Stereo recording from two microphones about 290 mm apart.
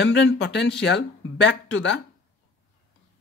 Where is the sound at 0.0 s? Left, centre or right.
Left.